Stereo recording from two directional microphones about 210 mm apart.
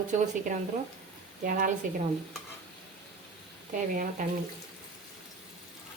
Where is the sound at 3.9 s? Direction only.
40° right (ahead or behind).